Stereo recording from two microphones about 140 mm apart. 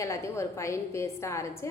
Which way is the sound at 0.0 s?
20° left (ahead or behind).